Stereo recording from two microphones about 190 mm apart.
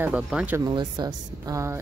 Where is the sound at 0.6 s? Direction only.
20° right (ahead or behind).